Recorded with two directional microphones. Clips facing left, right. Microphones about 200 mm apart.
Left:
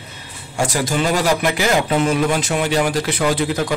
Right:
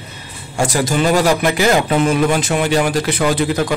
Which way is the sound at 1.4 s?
50° right (ahead or behind).